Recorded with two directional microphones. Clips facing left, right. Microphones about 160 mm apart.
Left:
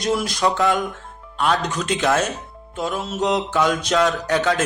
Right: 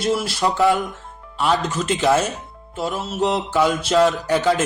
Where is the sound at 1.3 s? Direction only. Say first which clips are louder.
Right 1 dB; 5° right (ahead or behind).